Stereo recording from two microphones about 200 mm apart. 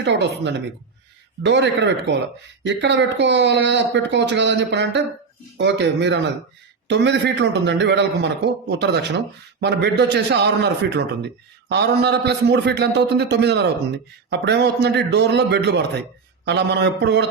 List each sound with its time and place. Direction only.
0.0 s a man's voice: 60° right (ahead or behind)